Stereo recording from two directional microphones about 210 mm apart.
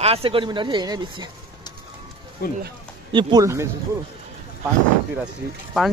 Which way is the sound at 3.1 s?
20° right (ahead or behind).